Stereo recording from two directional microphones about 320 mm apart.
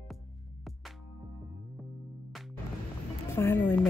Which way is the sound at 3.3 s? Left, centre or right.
Centre.